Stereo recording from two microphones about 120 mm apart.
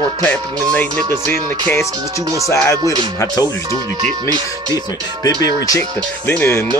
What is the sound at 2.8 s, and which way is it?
Speech, 35° right (ahead or behind).